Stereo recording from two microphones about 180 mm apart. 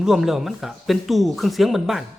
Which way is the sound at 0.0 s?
Centre (ahead or behind).